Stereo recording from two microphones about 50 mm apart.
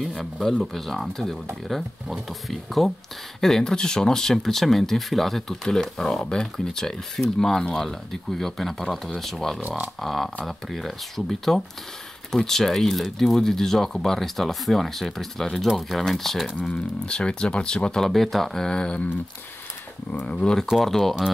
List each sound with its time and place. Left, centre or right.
0.0 s speech: centre
16.6 s speech: centre
20.1 s speech: left
20.7 s speech: centre